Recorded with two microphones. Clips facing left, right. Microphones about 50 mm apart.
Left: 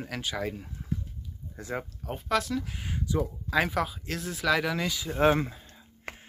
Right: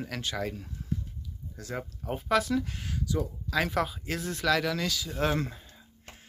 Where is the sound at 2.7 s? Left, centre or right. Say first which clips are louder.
Left 1 dB; left.